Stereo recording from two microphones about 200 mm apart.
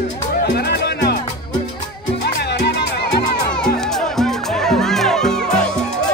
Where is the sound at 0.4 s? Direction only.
55° left (ahead or behind).